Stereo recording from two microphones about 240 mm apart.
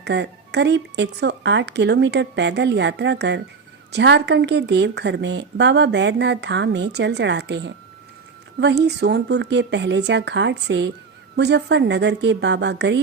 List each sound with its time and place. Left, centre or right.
0.0 s a woman's voice: right